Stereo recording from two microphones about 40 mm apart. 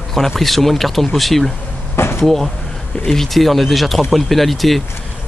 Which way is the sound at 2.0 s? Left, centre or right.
Left.